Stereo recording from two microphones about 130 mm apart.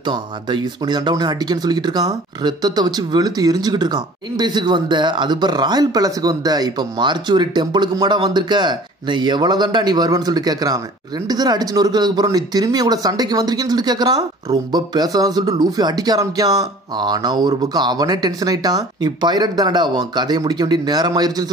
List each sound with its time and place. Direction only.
0.0 s speech: 35° right (ahead or behind)